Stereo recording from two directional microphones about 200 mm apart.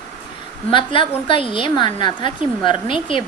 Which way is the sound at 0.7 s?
25° left (ahead or behind).